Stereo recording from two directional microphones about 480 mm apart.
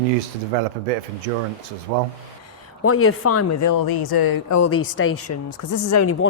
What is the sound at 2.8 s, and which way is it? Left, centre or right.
Speech, left.